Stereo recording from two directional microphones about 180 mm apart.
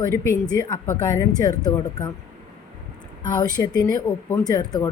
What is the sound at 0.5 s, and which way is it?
A woman's voice, 15° left (ahead or behind).